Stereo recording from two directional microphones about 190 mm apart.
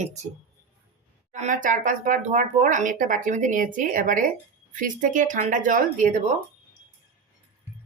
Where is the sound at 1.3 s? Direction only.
40° right (ahead or behind).